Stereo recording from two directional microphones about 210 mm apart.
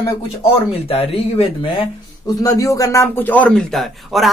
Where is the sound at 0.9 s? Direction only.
30° left (ahead or behind).